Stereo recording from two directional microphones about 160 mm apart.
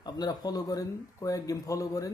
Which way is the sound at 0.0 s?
25° left (ahead or behind).